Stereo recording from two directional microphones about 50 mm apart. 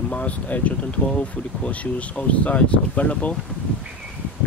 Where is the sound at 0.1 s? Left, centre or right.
Left.